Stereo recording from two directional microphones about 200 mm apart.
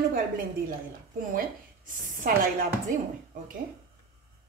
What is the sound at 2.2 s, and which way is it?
Speech, 45° right (ahead or behind).